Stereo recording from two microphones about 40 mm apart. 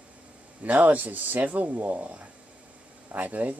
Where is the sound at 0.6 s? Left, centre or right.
Right.